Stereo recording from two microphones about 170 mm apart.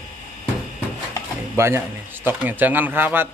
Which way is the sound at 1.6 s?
15° right (ahead or behind).